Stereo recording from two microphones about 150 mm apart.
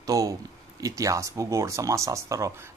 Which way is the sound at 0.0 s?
25° right (ahead or behind).